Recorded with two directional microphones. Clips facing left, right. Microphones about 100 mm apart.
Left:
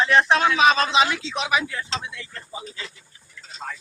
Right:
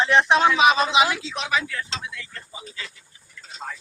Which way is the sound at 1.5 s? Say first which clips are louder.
Left 1 dB; 20° left (ahead or behind).